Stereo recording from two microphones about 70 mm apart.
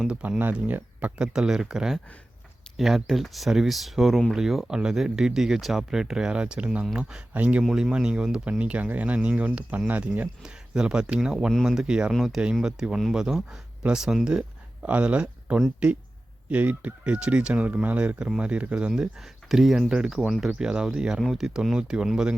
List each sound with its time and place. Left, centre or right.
0.2 s speech: right
1.3 s speech: centre
10.4 s speech: centre
19.5 s speech: centre